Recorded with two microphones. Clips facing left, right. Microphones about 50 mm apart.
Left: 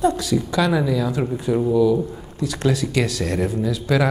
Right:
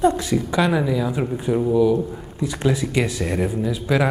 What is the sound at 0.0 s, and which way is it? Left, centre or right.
Speech, right.